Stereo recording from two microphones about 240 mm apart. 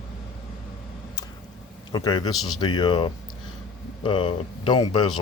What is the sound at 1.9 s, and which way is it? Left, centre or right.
Speech, centre.